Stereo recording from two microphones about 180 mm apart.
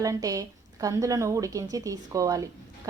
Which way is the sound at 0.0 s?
20° right (ahead or behind).